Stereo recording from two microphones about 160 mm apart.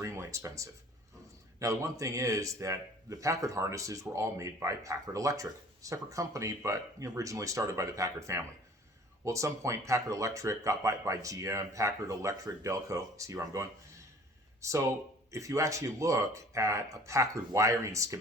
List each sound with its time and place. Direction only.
0.0 s speech: 20° right (ahead or behind)